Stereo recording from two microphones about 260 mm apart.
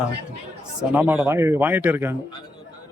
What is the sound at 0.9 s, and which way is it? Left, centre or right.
A man's voice, centre.